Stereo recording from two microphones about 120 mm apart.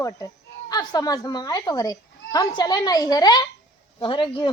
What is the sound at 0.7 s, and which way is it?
A woman's voice, 35° left (ahead or behind).